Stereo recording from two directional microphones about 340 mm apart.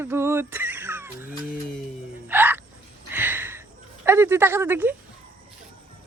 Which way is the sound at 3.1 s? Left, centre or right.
Centre.